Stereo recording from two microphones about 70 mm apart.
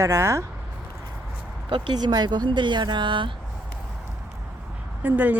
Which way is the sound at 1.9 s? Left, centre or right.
Right.